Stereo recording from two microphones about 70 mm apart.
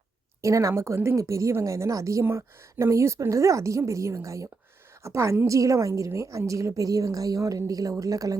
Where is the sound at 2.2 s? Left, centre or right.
Right.